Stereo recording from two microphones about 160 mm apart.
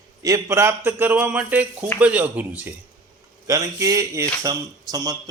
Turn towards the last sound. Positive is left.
turn(degrees=-25)  # may be behind; listen again after turning